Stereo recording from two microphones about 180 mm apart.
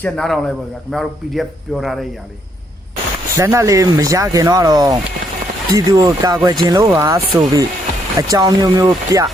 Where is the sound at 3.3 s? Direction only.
15° right (ahead or behind).